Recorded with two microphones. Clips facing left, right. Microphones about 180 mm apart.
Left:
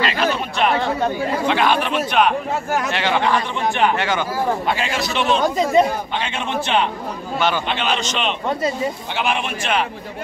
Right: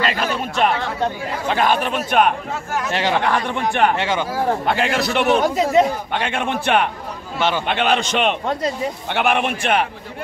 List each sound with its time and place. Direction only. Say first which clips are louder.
0.0 s a sound: left 1 dB; 45° right (ahead or behind)
1.5 s a man's voice: right 2 dB; 45° right (ahead or behind)
3.3 s a man's voice: even; 55° right (ahead or behind)
4.0 s speech: even; 30° right (ahead or behind)
4.6 s a man's voice: right 3 dB; 60° right (ahead or behind)
5.6 s speech: left 2 dB; 5° right (ahead or behind)
6.1 s a man's voice: right 1 dB; 55° right (ahead or behind)
7.3 s speech: even; 25° right (ahead or behind)
7.6 s a man's voice: right 3 dB; 55° right (ahead or behind)